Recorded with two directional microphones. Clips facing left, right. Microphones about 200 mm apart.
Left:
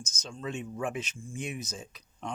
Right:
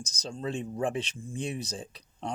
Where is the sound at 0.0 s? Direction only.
35° right (ahead or behind).